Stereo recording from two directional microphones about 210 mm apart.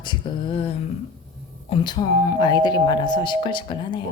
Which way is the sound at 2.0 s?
25° left (ahead or behind).